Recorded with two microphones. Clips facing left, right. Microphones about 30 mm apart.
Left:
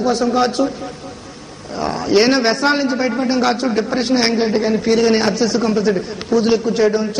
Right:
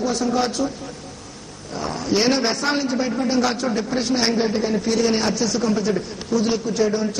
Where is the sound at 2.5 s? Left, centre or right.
Left.